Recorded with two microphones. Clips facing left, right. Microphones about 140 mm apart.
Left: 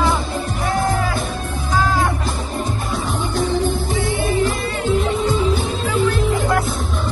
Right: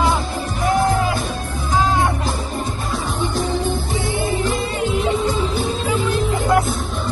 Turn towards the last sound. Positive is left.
turn(degrees=-15)  # may be behind; listen again after turning